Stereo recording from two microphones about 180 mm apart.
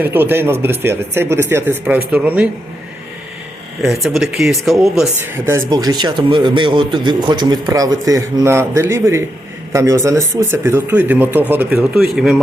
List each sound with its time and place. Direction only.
0.0 s speech: 10° right (ahead or behind)
3.8 s speech: centre (ahead or behind)
5.5 s a man's voice: 15° right (ahead or behind); by 12.4 s centre (ahead or behind)